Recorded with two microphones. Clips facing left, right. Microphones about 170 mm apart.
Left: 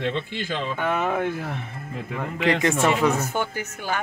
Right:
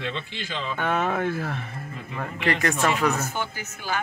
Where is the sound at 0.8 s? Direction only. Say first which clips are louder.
Even; 10° left (ahead or behind).